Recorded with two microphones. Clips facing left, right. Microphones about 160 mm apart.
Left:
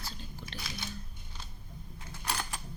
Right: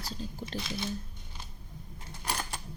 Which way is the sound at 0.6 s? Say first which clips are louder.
Right 8 dB; centre (ahead or behind).